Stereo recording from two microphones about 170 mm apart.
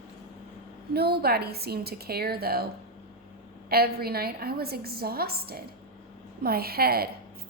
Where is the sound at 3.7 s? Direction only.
65° right (ahead or behind).